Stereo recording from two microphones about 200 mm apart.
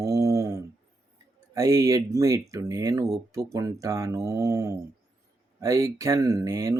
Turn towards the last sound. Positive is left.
turn(degrees=-15)  # may be behind; listen again after turning